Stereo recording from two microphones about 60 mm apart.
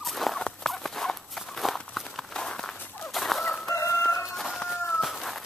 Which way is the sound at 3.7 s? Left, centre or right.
Left.